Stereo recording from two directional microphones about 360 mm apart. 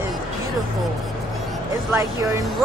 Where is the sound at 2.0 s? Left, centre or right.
Centre.